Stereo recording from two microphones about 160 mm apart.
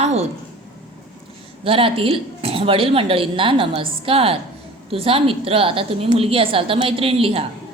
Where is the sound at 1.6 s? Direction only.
35° right (ahead or behind).